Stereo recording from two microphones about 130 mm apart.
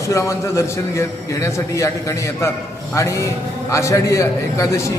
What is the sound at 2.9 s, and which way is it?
A man's voice, 25° left (ahead or behind).